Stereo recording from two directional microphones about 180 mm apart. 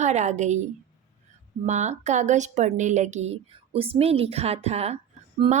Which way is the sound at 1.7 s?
40° right (ahead or behind).